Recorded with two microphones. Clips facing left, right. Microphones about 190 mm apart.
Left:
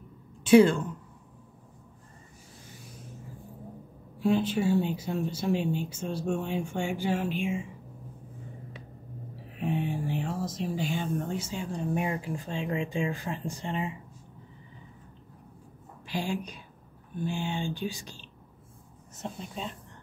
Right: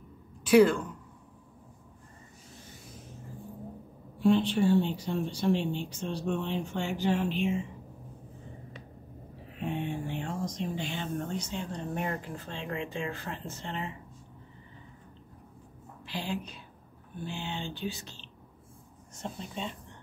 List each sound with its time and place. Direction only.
0.4 s a woman's voice: 25° left (ahead or behind)
4.2 s speech: 5° left (ahead or behind)
9.6 s speech: centre (ahead or behind)
16.1 s a woman's voice: 15° left (ahead or behind)